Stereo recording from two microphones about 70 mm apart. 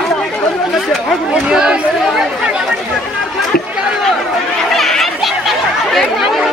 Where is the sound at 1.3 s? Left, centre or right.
Centre.